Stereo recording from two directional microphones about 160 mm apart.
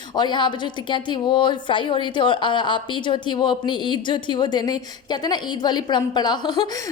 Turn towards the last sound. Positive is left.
turn(degrees=25)  # may be behind; listen again after turning